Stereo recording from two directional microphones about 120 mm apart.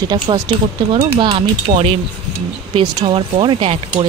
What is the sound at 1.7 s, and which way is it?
Speech, 55° right (ahead or behind).